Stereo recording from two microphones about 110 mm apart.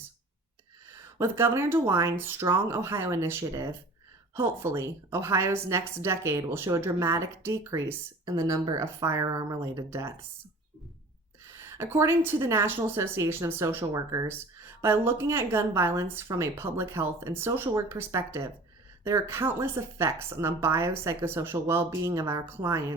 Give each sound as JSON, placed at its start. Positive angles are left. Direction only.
{"t": 0.9, "sound": "a woman's voice", "side_deg": -25}
{"t": 11.5, "sound": "a woman's voice", "side_deg": -25}
{"t": 14.3, "sound": "a woman's voice", "side_deg": -25}